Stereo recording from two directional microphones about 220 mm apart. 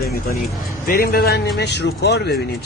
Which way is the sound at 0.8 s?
40° left (ahead or behind).